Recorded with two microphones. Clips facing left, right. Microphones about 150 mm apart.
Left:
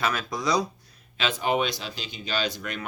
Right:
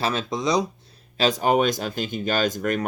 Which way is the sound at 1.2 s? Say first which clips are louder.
Right 6 dB; 40° right (ahead or behind).